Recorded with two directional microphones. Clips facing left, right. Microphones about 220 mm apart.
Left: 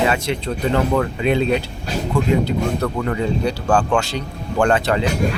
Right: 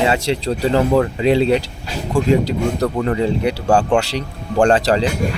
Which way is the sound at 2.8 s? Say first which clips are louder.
Right 3 dB; 30° right (ahead or behind).